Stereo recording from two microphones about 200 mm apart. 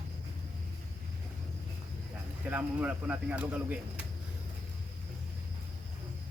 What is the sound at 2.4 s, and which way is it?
Speech, 10° right (ahead or behind).